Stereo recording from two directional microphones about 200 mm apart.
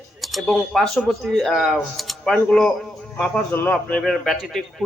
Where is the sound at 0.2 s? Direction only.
Centre (ahead or behind).